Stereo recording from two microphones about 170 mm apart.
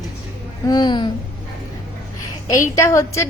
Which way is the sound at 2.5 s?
20° left (ahead or behind).